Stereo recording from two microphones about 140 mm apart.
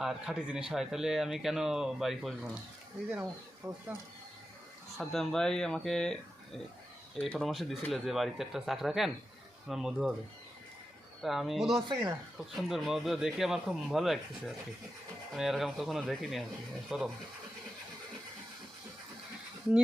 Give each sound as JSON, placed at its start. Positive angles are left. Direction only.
{"t": 0.0, "sound": "speech", "side_deg": -5}
{"t": 3.6, "sound": "speech", "side_deg": -15}
{"t": 4.9, "sound": "speech", "side_deg": 0}
{"t": 11.2, "sound": "speech", "side_deg": 0}
{"t": 11.9, "sound": "speech", "side_deg": -35}
{"t": 12.5, "sound": "speech", "side_deg": 0}